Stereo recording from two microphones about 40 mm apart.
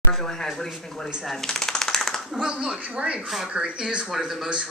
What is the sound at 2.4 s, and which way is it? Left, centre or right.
Speech, right.